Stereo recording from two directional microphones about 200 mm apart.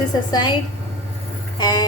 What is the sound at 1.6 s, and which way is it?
Speech, 20° left (ahead or behind).